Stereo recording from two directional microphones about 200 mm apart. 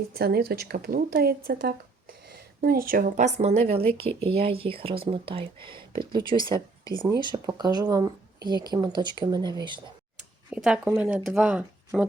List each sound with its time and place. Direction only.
0.1 s a woman's voice: 50° right (ahead or behind); by 9.8 s 20° right (ahead or behind)
10.5 s speech: 5° right (ahead or behind)